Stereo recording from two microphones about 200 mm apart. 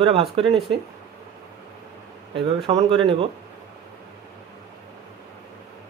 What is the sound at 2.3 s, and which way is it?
Speech, 25° right (ahead or behind).